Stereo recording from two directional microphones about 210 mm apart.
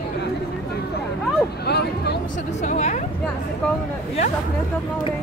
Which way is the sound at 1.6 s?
50° left (ahead or behind).